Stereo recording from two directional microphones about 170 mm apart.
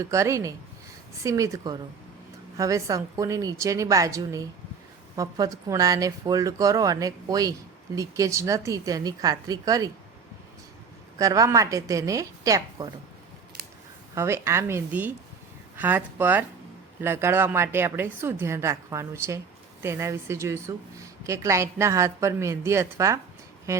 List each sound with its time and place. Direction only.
0.0 s speech: 20° right (ahead or behind)
11.2 s speech: 20° right (ahead or behind)
14.2 s a woman's voice: 15° right (ahead or behind)
23.7 s a sound: 15° right (ahead or behind)